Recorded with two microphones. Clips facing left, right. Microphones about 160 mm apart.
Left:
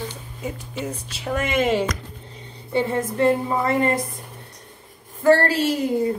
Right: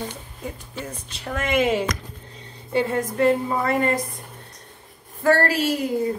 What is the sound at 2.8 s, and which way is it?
A woman's voice, 30° left (ahead or behind).